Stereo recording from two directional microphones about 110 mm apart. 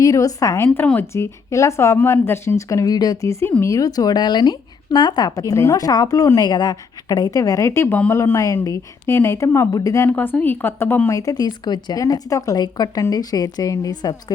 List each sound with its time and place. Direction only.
0.0 s speech: 30° left (ahead or behind)
10.1 s speech: 15° left (ahead or behind)
11.1 s speech: 35° left (ahead or behind)